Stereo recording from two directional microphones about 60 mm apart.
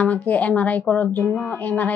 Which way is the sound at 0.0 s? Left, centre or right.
Left.